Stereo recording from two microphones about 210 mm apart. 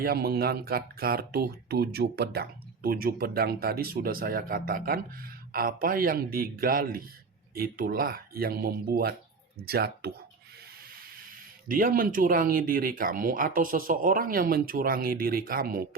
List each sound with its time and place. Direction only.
0.0 s speech: 45° right (ahead or behind)
11.7 s speech: 40° right (ahead or behind)